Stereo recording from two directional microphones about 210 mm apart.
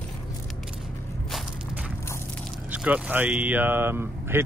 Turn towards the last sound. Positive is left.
turn(degrees=-10)  # may be behind; listen again after turning